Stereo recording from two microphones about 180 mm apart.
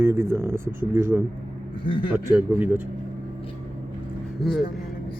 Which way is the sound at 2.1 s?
10° right (ahead or behind).